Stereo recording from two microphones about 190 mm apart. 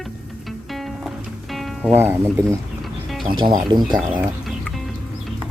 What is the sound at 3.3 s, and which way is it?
Speech, 25° right (ahead or behind).